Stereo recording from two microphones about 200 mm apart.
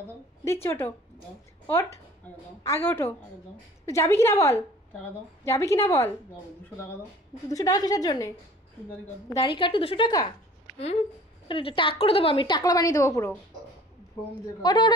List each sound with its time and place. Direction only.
0.5 s a woman's voice: 10° left (ahead or behind)
2.6 s a woman's voice: 10° left (ahead or behind)
7.4 s a woman's voice: 15° left (ahead or behind)
9.4 s a woman's voice: 25° left (ahead or behind)
14.6 s a woman's voice: 20° left (ahead or behind)